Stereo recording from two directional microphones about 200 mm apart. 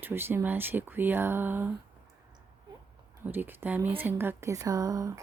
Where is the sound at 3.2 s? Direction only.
10° right (ahead or behind).